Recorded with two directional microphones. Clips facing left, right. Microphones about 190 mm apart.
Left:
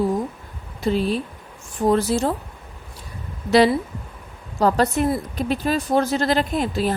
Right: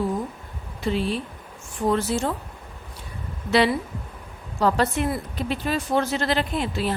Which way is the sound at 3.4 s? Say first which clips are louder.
Left 4 dB; 40° left (ahead or behind).